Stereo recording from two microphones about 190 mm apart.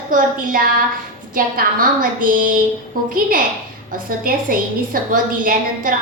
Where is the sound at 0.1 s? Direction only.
45° right (ahead or behind).